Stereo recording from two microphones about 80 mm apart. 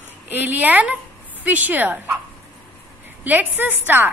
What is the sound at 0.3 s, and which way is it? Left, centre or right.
A woman's voice, right.